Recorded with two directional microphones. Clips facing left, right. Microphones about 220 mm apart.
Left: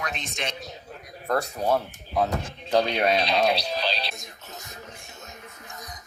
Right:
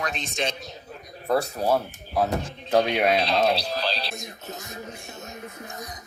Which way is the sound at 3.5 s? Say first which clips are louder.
Even; 5° right (ahead or behind).